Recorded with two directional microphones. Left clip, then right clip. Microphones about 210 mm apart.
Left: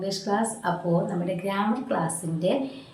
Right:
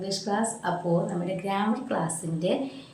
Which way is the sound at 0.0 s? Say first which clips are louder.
Left 2 dB; 5° right (ahead or behind).